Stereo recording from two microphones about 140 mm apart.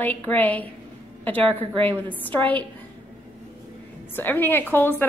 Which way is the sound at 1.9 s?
10° left (ahead or behind).